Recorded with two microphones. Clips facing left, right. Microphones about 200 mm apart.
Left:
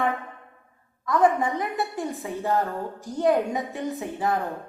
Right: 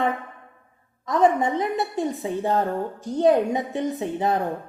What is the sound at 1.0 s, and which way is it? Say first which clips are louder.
A woman's voice: right 2 dB; 20° right (ahead or behind).